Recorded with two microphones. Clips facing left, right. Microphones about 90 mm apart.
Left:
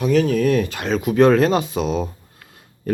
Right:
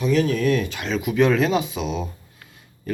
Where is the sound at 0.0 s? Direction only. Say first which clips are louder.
Left 3 dB; 50° left (ahead or behind).